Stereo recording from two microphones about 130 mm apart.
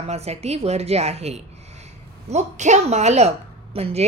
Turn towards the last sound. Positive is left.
turn(degrees=-50)  # may be behind; listen again after turning